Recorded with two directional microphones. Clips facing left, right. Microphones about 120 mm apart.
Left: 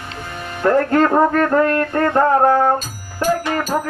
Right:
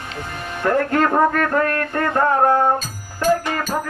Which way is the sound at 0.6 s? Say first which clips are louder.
Left 3 dB; 35° left (ahead or behind).